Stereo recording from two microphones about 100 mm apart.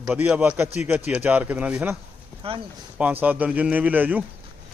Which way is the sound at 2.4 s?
70° right (ahead or behind).